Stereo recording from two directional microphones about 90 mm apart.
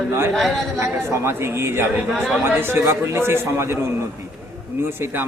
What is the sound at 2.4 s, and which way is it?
A man's voice, 25° right (ahead or behind).